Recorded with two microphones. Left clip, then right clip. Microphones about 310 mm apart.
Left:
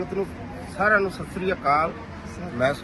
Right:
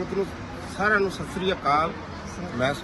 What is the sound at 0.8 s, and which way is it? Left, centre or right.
Speech, centre.